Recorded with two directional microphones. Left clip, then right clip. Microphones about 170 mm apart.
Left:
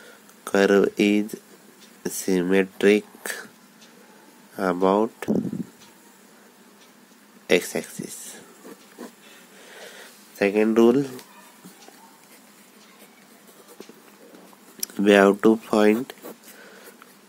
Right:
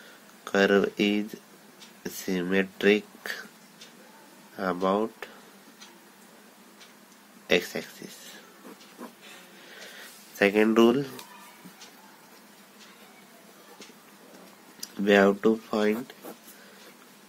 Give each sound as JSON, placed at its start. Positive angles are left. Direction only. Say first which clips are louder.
{"t": 0.4, "sound": "speech", "louder": "left 4 dB", "side_deg": 40}
{"t": 4.6, "sound": "speech", "louder": "left 6 dB", "side_deg": 40}
{"t": 7.4, "sound": "speech", "louder": "left 4 dB", "side_deg": 40}
{"t": 9.7, "sound": "a sound", "louder": "left 3 dB", "side_deg": 40}
{"t": 10.3, "sound": "speech", "louder": "left 2 dB", "side_deg": 20}
{"t": 14.8, "sound": "speech", "louder": "left 5 dB", "side_deg": 55}